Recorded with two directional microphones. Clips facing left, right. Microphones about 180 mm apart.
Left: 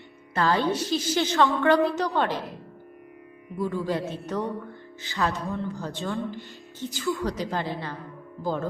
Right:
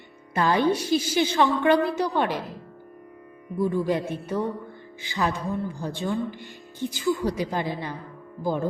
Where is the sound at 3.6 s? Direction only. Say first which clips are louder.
Right 3 dB; 15° right (ahead or behind).